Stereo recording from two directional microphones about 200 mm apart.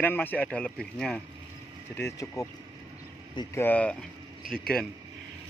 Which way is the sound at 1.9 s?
15° left (ahead or behind).